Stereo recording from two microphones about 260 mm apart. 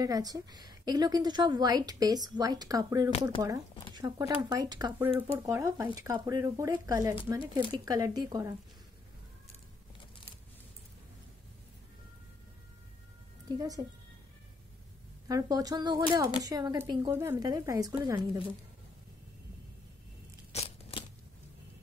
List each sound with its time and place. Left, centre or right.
0.0 s speech: centre
13.6 s speech: centre
15.2 s speech: centre
20.5 s a sound: left